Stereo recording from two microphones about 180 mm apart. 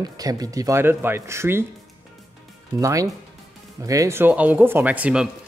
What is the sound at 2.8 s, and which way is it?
A man's voice, 20° right (ahead or behind).